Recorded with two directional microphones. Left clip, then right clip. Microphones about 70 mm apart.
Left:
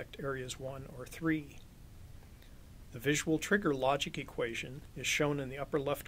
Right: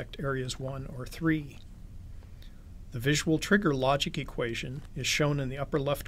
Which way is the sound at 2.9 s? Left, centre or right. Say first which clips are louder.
Right 4 dB; left.